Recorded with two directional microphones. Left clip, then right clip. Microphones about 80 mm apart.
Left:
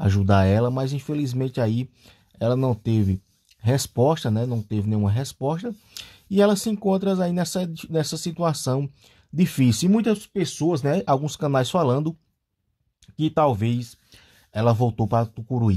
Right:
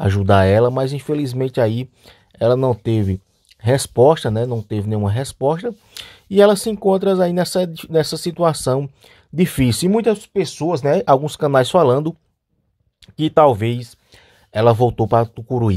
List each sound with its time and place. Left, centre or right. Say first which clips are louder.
0.0 s speech: right 7 dB; right
8.7 s speech: right 7 dB; right
13.4 s a sound: right 9 dB; right
14.6 s speech: right 8 dB; right